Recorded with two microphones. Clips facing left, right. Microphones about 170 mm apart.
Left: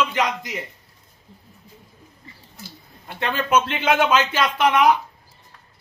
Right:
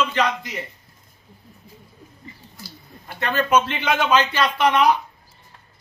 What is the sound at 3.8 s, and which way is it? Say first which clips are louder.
Speech: left 1 dB; 20° left (ahead or behind).